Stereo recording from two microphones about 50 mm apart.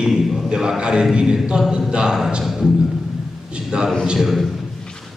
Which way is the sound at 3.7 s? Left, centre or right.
Centre.